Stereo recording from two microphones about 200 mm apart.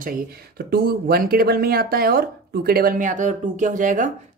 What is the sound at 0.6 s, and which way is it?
Speech, 50° right (ahead or behind).